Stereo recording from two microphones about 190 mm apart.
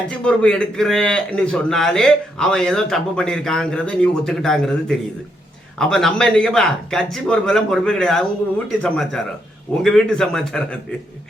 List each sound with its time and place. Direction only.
0.3 s a man's voice: 5° left (ahead or behind)